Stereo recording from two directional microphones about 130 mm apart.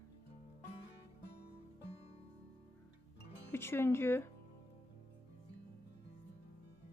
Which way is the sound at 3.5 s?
20° left (ahead or behind).